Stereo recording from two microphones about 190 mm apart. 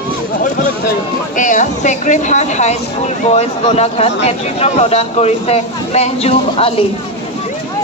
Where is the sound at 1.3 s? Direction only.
40° left (ahead or behind).